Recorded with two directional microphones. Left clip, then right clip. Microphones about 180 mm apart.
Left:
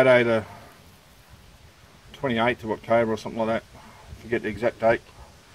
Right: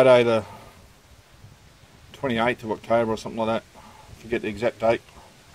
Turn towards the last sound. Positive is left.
turn(degrees=-25)  # may be behind; listen again after turning